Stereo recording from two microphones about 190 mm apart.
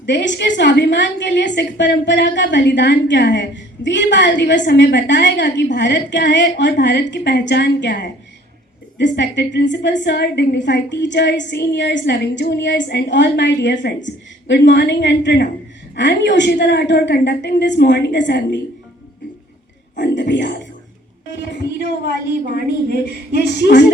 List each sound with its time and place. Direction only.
0.0 s a woman's voice: 70° left (ahead or behind)
20.0 s a woman's voice: 70° left (ahead or behind)